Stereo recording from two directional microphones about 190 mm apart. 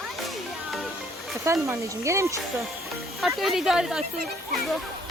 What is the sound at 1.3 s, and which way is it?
Speech, 15° right (ahead or behind).